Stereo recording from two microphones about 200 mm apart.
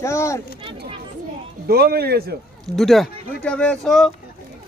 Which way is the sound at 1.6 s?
50° right (ahead or behind).